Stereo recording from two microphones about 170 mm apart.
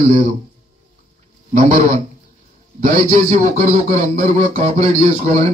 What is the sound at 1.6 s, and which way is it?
A man's voice, 50° right (ahead or behind).